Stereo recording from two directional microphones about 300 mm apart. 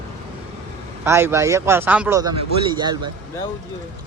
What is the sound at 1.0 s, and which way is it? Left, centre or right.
Speech, centre.